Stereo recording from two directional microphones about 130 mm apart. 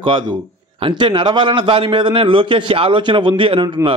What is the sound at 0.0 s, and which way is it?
A man's voice, 40° right (ahead or behind).